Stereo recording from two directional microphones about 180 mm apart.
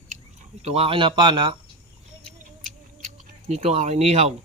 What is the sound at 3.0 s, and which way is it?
Speech, 40° right (ahead or behind).